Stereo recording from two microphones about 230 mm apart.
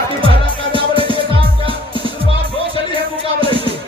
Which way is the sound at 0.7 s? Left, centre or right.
Right.